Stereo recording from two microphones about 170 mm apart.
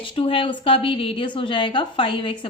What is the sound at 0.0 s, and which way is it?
A woman's voice, 30° left (ahead or behind).